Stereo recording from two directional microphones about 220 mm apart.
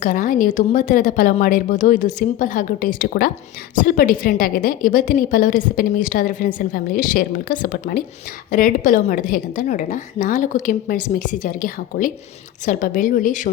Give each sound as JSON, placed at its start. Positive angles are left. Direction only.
{"t": 0.0, "sound": "a woman's voice", "side_deg": 35}